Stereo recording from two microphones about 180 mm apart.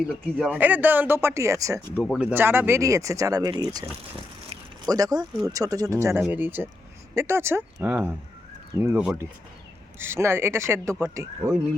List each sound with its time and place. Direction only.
0.1 s speech: 5° right (ahead or behind); by 3.8 s 20° right (ahead or behind)
4.9 s speech: 20° right (ahead or behind)